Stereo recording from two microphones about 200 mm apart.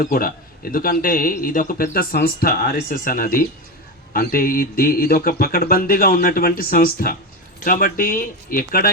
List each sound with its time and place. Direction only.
0.0 s speech: 45° left (ahead or behind)